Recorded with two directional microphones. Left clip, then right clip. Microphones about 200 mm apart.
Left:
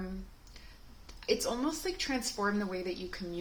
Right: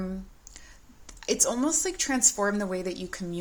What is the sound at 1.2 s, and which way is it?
Speech, 50° right (ahead or behind).